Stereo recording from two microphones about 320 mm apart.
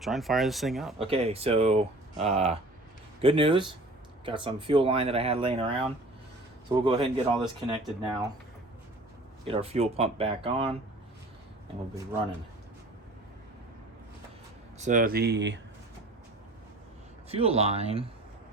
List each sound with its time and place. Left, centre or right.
0.0 s speech: centre
0.9 s speech: centre
9.5 s speech: centre
14.8 s speech: right
17.2 s speech: centre